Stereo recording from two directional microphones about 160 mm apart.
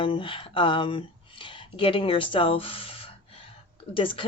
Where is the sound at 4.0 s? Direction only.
35° left (ahead or behind).